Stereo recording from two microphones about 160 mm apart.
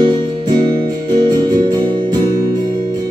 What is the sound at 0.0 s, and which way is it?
Music, 30° right (ahead or behind).